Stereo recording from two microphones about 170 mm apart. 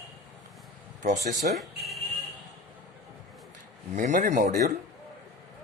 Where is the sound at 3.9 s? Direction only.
45° right (ahead or behind).